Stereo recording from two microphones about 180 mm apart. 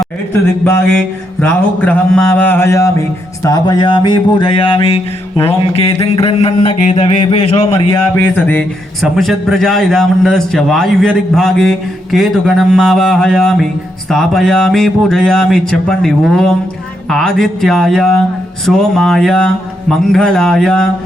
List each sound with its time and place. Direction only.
0.6 s mantra: 10° left (ahead or behind)
3.4 s a man's voice: 20° left (ahead or behind)
8.4 s a man's voice: 5° left (ahead or behind)